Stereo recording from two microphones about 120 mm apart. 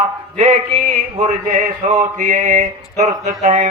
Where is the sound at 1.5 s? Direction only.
90° right.